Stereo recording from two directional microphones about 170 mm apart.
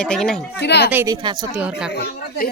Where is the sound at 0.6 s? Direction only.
80° left.